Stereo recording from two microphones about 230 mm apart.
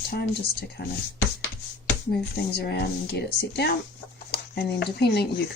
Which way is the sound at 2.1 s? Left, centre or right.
Left.